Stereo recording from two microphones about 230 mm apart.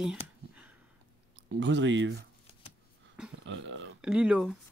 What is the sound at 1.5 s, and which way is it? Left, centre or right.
Speech, right.